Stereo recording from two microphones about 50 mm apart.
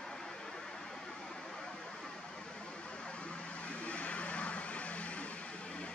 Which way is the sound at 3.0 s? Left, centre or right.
Left.